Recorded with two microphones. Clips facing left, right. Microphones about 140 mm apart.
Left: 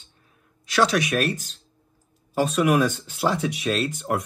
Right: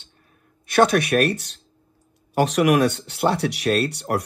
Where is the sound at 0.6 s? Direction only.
55° right (ahead or behind).